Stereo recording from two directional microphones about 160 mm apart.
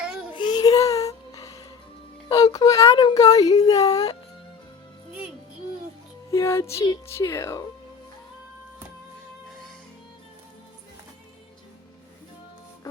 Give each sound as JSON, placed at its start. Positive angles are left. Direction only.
{"t": 0.3, "sound": "a sound", "side_deg": 25}
{"t": 2.3, "sound": "speech", "side_deg": 25}
{"t": 6.3, "sound": "speech", "side_deg": 20}